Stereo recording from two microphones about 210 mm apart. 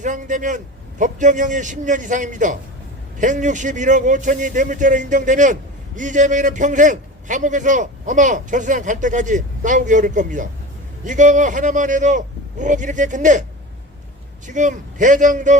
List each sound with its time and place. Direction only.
0.0 s a man's voice: 35° right (ahead or behind)
14.4 s a man's voice: 35° right (ahead or behind)